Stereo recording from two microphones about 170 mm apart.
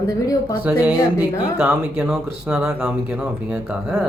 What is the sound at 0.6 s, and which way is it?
Speech, 5° right (ahead or behind).